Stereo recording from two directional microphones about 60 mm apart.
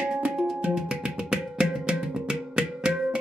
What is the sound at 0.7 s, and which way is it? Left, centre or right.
Music, centre.